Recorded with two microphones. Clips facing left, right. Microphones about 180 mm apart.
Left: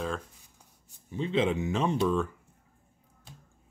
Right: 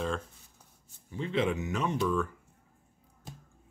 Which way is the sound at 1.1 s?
20° left (ahead or behind).